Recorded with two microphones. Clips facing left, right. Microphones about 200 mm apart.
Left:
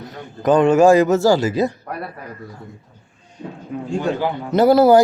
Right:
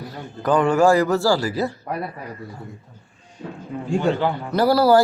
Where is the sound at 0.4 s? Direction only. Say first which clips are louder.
Left 4 dB; 20° left (ahead or behind).